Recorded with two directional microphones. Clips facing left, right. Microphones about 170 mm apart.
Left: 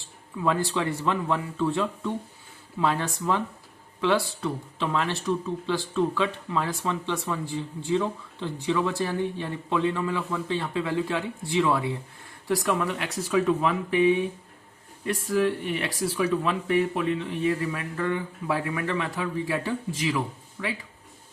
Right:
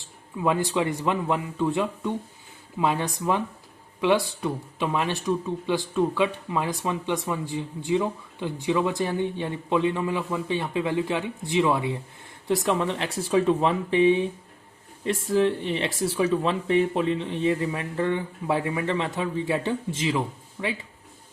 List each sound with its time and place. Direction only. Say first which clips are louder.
0.0 s speech: right 1 dB; 20° right (ahead or behind)